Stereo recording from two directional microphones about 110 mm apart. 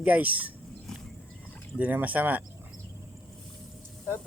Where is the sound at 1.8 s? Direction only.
15° right (ahead or behind).